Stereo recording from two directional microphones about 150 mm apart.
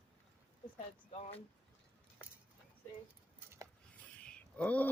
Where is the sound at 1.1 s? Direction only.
45° left (ahead or behind).